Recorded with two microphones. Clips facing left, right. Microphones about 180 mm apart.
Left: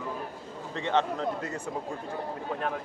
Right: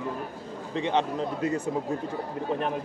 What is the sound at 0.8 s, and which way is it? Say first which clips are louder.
Speech: right 1 dB; 15° right (ahead or behind).